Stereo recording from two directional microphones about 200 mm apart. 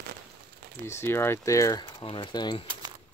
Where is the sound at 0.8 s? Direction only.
10° left (ahead or behind).